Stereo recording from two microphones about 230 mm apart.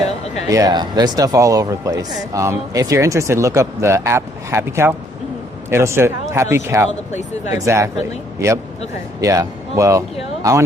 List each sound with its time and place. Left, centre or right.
0.4 s speech: centre
7.1 s speech: left
7.5 s speech: centre
9.2 s speech: centre